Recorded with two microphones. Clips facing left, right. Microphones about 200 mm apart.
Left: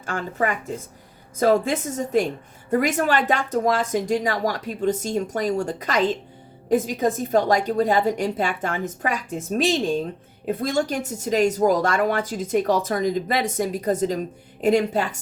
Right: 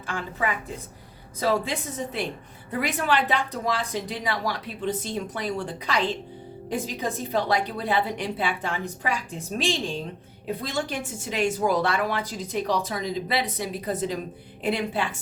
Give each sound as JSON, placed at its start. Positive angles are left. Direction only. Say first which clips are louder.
{"t": 0.0, "sound": "a woman's voice", "louder": "left 4 dB", "side_deg": 45}